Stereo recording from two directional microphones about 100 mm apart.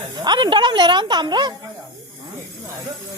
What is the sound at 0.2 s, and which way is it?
A woman's voice, 45° right (ahead or behind).